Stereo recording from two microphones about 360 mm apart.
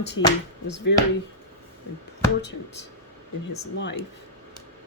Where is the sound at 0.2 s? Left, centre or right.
Left.